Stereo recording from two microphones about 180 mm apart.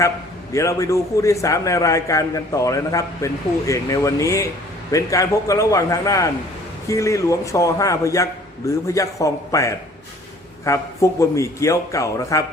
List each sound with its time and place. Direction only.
0.5 s a man's voice: 15° left (ahead or behind)